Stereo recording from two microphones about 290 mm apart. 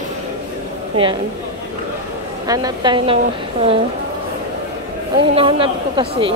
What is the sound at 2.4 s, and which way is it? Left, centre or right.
Speech, centre.